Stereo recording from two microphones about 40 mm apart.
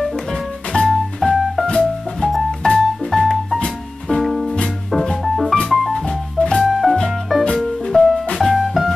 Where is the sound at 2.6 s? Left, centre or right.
Centre.